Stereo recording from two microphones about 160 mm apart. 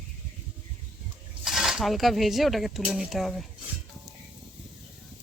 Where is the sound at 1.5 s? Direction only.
Centre (ahead or behind).